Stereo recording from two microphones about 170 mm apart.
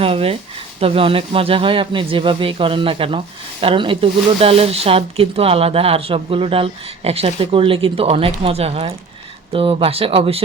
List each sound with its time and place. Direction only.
0.0 s speech: 35° right (ahead or behind)